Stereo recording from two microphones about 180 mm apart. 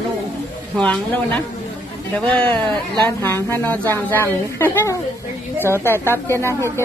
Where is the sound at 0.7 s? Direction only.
5° left (ahead or behind).